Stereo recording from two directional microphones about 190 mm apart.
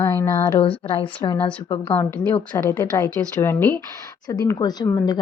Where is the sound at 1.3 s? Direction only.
5° left (ahead or behind).